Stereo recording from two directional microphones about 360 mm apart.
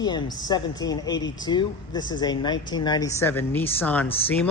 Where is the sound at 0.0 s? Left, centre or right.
Centre.